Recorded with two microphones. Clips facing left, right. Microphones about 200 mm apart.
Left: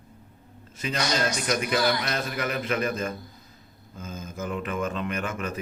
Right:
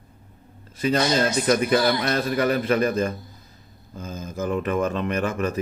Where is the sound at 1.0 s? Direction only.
25° right (ahead or behind).